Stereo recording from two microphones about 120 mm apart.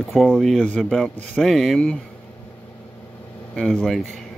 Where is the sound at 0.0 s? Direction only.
Centre (ahead or behind).